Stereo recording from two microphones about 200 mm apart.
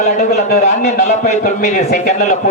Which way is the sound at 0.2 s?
40° left (ahead or behind).